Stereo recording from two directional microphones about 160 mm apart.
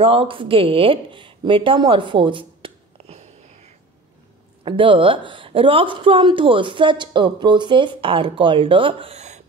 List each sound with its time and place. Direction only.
0.0 s speech: 35° right (ahead or behind)